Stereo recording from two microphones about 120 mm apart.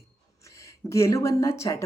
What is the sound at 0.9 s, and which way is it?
Speech, 25° left (ahead or behind).